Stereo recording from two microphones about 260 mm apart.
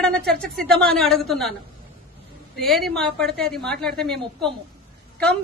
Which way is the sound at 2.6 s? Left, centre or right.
Centre.